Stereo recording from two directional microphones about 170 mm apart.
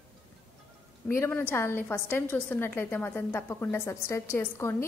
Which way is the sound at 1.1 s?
10° left (ahead or behind).